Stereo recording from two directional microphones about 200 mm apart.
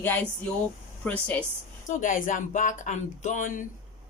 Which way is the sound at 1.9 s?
40° left (ahead or behind).